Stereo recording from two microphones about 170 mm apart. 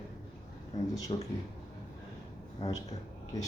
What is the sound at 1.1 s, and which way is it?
Speech, 30° left (ahead or behind).